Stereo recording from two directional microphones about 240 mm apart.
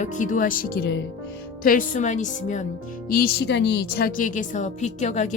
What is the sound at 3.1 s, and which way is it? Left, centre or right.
A woman's voice, left.